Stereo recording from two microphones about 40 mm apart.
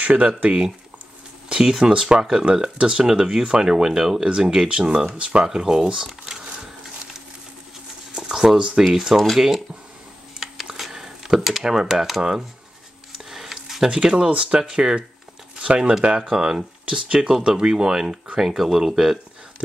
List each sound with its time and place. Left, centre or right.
0.0 s speech: right
1.5 s speech: right
5.5 s speech: centre
6.4 s a sound: right
8.1 s shuffling cards: centre
9.1 s speech: centre
10.8 s a sound: centre
11.6 s speech: centre
13.3 s a sound: centre
13.8 s speech: right
14.6 s speech: centre